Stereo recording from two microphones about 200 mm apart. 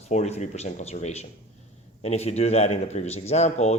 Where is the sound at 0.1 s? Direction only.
35° left (ahead or behind).